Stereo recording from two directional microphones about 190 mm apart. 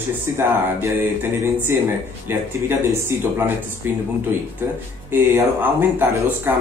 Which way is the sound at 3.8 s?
10° right (ahead or behind).